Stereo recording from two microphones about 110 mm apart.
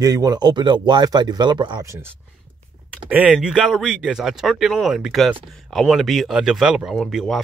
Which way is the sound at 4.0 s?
5° right (ahead or behind).